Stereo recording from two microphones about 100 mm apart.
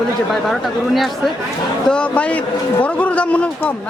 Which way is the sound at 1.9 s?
10° left (ahead or behind).